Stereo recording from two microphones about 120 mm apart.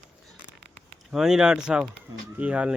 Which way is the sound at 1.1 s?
5° right (ahead or behind).